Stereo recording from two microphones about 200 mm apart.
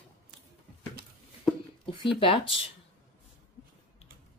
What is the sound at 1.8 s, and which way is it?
Speech, 25° left (ahead or behind).